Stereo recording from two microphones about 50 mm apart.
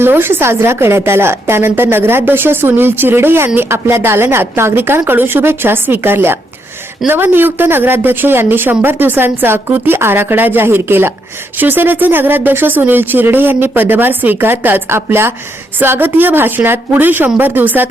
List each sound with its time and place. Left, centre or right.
0.0 s a woman's voice: right
11.5 s speech: right
15.8 s speech: right